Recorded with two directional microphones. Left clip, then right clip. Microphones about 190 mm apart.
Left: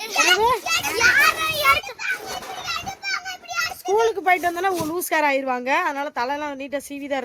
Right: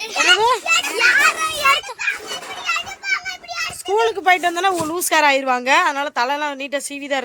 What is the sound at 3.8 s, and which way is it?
A woman's voice, 10° left (ahead or behind).